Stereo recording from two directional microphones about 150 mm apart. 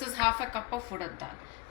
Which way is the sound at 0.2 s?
35° right (ahead or behind).